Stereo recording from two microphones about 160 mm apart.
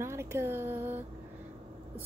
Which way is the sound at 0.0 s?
15° right (ahead or behind).